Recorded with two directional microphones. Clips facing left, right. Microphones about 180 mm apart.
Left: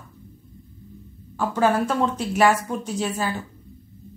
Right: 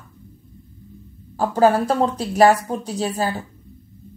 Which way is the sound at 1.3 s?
35° right (ahead or behind).